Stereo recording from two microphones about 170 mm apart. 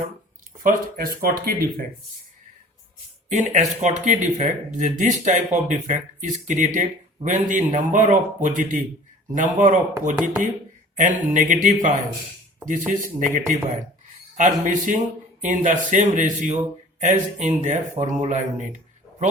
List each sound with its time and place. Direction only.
0.6 s speech: 60° right (ahead or behind)
3.2 s speech: 45° right (ahead or behind)